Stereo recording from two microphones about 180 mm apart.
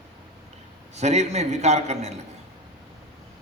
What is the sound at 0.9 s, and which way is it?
A man's voice, 40° right (ahead or behind).